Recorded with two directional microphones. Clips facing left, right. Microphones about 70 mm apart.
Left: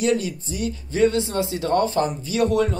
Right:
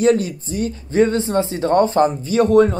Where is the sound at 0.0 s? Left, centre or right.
Right.